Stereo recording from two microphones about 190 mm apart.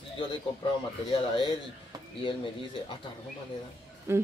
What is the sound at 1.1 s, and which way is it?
Speech, 25° left (ahead or behind).